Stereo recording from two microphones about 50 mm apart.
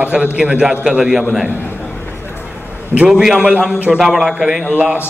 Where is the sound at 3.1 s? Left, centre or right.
Centre.